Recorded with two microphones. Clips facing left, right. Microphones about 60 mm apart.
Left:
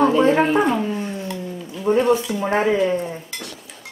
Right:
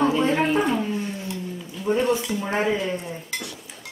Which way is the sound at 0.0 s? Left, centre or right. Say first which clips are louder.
Left 5 dB; left.